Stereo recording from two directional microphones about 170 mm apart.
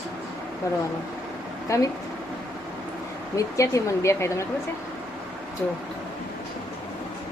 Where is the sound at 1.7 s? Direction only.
20° left (ahead or behind).